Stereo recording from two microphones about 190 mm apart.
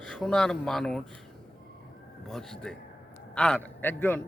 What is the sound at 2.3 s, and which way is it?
A man's voice, 5° left (ahead or behind).